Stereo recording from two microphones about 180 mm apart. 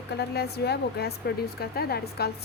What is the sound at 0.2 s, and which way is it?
A woman's voice, 65° left (ahead or behind).